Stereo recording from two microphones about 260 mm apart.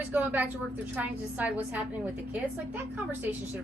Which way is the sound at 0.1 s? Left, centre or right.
Centre.